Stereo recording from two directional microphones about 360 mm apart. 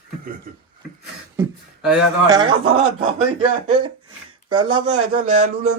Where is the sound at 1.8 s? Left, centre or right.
Centre.